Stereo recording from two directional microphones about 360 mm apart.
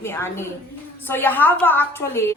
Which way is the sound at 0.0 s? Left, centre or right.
Centre.